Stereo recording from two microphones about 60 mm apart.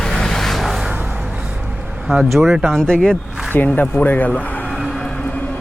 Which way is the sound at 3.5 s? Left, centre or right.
Left.